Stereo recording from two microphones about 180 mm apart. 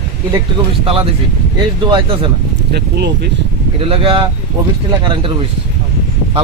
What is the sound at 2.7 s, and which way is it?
Speech, 65° right (ahead or behind).